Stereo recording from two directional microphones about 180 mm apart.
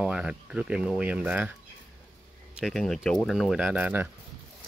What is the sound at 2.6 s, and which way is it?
Speech, centre (ahead or behind).